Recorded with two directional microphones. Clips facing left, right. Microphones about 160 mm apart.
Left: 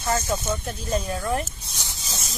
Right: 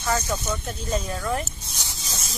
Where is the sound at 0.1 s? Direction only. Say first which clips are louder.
Left 1 dB; 25° left (ahead or behind).